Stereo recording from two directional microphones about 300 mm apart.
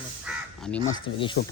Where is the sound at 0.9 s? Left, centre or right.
Centre.